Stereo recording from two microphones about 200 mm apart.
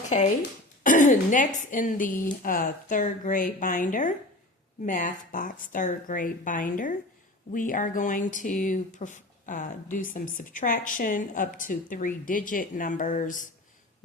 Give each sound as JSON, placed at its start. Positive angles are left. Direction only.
{"t": 0.0, "sound": "a woman's voice", "side_deg": 35}